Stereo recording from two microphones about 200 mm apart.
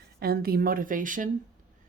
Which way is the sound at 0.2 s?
50° right (ahead or behind).